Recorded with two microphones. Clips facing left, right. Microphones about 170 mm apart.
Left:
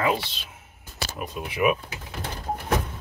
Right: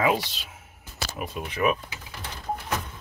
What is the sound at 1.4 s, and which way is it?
Speech, 10° left (ahead or behind).